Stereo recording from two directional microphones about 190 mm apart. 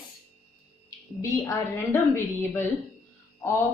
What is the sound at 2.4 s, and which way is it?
Speech, 10° left (ahead or behind).